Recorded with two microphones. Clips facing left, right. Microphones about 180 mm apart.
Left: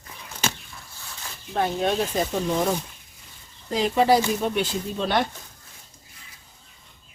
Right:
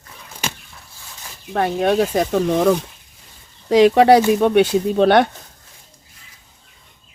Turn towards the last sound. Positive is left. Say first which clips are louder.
# right 11 dB
turn(degrees=-65)  # may be behind; listen again after turning